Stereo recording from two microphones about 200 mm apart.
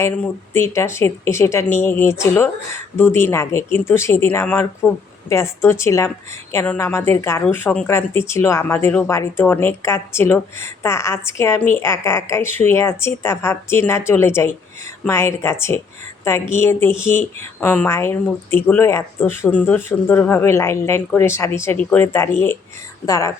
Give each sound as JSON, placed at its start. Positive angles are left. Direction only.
{"t": 0.0, "sound": "speech", "side_deg": 10}